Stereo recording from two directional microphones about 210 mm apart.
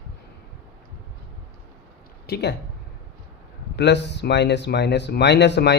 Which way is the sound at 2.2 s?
50° left (ahead or behind).